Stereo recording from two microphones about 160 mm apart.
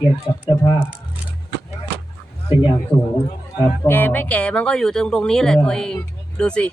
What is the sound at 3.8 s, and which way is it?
Speech, 10° left (ahead or behind).